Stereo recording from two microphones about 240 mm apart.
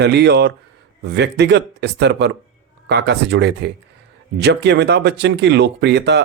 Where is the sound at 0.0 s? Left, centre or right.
Right.